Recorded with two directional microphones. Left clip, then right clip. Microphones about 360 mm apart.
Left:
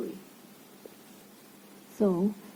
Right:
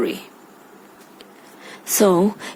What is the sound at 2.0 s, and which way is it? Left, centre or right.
Speech, right.